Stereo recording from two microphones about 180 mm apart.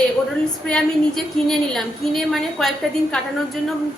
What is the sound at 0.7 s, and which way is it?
A woman's voice, centre (ahead or behind).